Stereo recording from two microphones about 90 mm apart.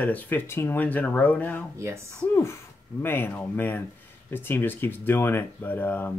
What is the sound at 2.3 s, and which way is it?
Speech, 30° left (ahead or behind).